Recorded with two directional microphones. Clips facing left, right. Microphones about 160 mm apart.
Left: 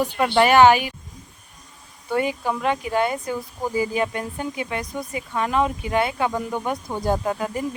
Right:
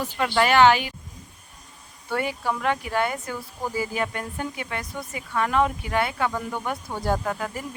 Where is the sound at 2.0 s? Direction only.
20° left (ahead or behind).